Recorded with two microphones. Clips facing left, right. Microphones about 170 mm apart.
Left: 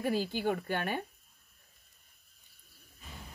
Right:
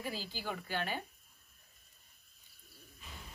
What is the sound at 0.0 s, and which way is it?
A woman's voice, 55° left (ahead or behind).